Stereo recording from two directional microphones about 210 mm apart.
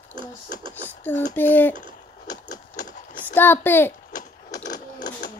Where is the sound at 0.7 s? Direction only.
10° left (ahead or behind).